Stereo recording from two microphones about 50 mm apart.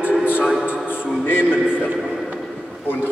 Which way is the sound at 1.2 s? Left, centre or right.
Left.